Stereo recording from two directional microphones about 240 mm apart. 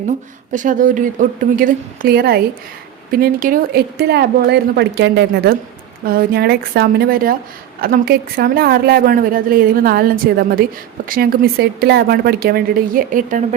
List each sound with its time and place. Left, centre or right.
0.5 s a woman's voice: right